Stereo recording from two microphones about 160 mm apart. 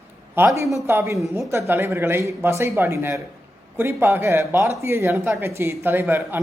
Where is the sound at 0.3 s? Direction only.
15° right (ahead or behind).